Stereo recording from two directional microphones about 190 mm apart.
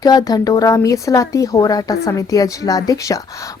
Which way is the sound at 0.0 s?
20° left (ahead or behind).